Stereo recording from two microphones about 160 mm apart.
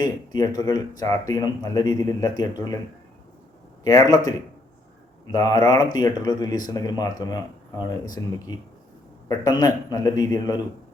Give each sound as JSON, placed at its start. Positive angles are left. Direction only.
{"t": 0.0, "sound": "speech", "side_deg": 25}
{"t": 3.8, "sound": "speech", "side_deg": 20}